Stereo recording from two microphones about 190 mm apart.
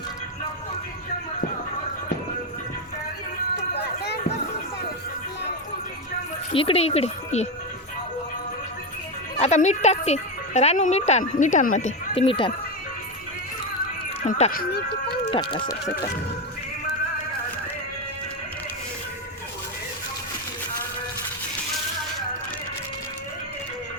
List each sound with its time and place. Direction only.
3.8 s run: 60° left (ahead or behind)
6.5 s speech: 30° left (ahead or behind)
9.4 s speech: 40° left (ahead or behind)
14.3 s speech: 35° left (ahead or behind)
14.5 s speech: 55° left (ahead or behind)
15.3 s speech: 25° left (ahead or behind)